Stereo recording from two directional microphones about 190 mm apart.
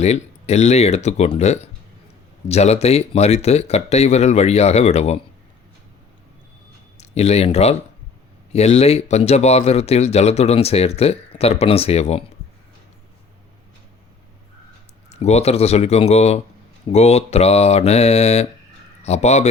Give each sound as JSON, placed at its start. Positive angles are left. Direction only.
{"t": 0.0, "sound": "speech", "side_deg": 35}
{"t": 6.9, "sound": "speech", "side_deg": 35}
{"t": 15.1, "sound": "speech", "side_deg": 35}